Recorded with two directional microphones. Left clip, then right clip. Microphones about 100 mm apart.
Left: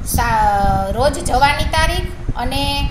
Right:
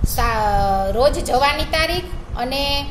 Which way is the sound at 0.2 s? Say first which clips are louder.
Left 3 dB; 50° right (ahead or behind).